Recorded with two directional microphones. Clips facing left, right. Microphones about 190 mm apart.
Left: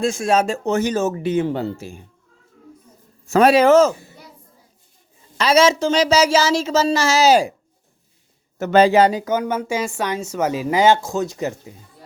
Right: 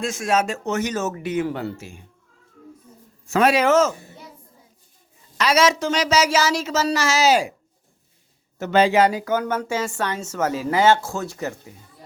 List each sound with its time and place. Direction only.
0.0 s speech: 30° left (ahead or behind)
3.2 s speech: 35° left (ahead or behind)
5.4 s speech: 30° left (ahead or behind)
8.5 s speech: 45° left (ahead or behind); by 11.7 s 20° left (ahead or behind)